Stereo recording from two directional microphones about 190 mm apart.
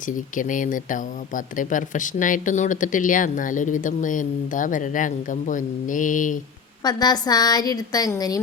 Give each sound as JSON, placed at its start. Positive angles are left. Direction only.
{"t": 0.3, "sound": "speech", "side_deg": 45}
{"t": 6.8, "sound": "a woman's voice", "side_deg": 20}